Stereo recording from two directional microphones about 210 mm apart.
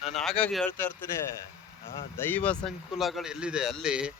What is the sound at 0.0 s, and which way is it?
Speech, centre (ahead or behind).